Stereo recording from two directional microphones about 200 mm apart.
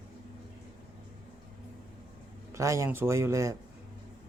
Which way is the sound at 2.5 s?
15° right (ahead or behind).